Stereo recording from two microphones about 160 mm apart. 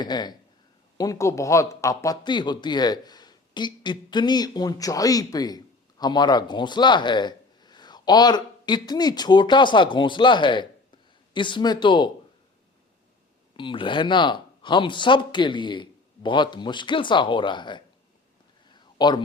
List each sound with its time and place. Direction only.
0.0 s speech: 25° left (ahead or behind)
13.6 s speech: 30° left (ahead or behind)
18.7 s a sound: 25° left (ahead or behind)